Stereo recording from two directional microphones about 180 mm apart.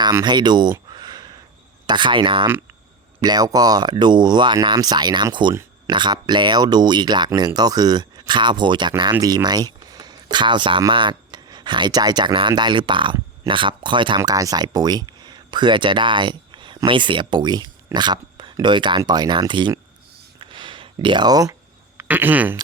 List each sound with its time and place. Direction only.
0.0 s speech: 20° right (ahead or behind)
20.4 s a sound: 25° right (ahead or behind)
21.9 s speech: 10° right (ahead or behind)